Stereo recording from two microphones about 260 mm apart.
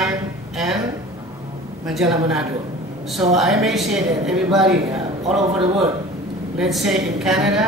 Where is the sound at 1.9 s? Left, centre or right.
Centre.